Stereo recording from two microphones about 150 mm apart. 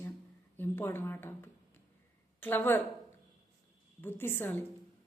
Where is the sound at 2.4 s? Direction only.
15° left (ahead or behind).